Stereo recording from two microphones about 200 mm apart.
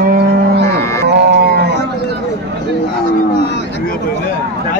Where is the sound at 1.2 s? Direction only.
55° right (ahead or behind).